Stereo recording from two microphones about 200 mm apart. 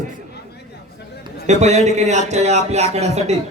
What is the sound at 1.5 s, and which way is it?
A man's voice, 35° right (ahead or behind).